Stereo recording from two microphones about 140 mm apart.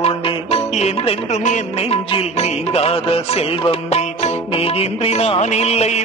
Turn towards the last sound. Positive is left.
turn(degrees=50)  # may be behind; listen again after turning